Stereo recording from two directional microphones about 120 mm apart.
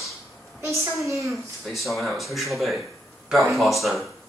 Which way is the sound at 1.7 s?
Centre (ahead or behind).